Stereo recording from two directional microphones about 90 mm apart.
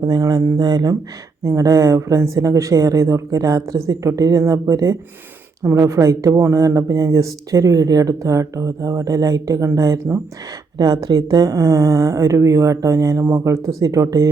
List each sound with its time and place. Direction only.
0.0 s speech: 45° right (ahead or behind)
1.5 s speech: 35° right (ahead or behind)